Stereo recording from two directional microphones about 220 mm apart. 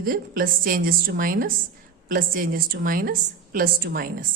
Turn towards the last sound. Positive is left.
turn(degrees=-40)  # may be behind; listen again after turning